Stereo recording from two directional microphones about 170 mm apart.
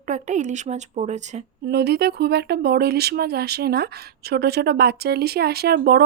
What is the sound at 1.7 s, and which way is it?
Speech, 75° right (ahead or behind).